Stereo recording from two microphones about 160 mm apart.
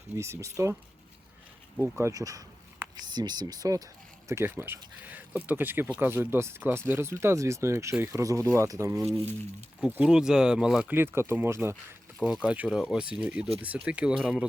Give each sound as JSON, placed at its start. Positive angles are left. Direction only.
{"t": 0.2, "sound": "speech", "side_deg": -20}
{"t": 1.8, "sound": "speech", "side_deg": -15}
{"t": 9.8, "sound": "speech", "side_deg": -5}
{"t": 12.2, "sound": "speech", "side_deg": -5}